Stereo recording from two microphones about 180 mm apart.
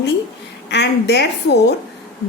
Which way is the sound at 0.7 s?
65° left (ahead or behind).